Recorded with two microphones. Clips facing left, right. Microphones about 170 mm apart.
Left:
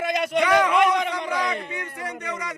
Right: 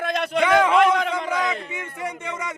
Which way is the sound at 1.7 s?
20° right (ahead or behind).